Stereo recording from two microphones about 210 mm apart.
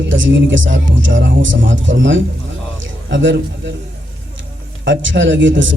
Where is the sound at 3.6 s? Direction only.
60° right (ahead or behind).